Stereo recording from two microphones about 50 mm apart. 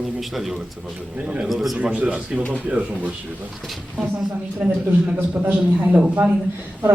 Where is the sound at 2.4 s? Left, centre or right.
Left.